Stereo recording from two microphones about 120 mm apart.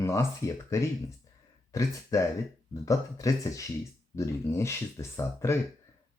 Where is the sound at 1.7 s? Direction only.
25° left (ahead or behind).